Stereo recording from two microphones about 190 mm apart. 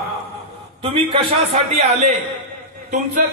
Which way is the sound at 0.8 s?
30° right (ahead or behind).